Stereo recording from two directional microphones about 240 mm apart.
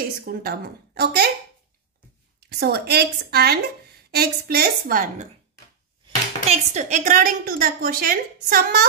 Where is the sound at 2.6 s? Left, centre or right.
Right.